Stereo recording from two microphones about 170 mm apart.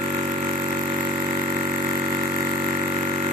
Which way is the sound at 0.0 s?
45° right (ahead or behind).